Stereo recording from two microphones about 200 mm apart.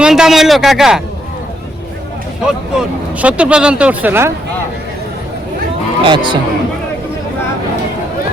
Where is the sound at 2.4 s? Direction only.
5° right (ahead or behind).